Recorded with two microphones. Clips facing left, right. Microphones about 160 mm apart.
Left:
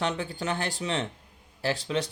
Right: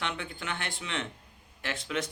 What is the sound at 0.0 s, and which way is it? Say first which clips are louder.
Speech: left 7 dB; 35° left (ahead or behind).